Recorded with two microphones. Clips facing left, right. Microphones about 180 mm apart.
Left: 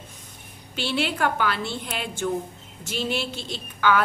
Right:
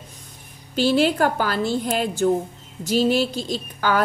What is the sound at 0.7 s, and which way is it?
A woman's voice, 40° right (ahead or behind).